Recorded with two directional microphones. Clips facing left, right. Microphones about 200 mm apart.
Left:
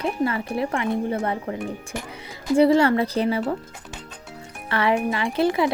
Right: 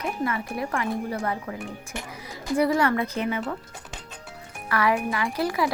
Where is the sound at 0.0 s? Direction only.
30° left (ahead or behind).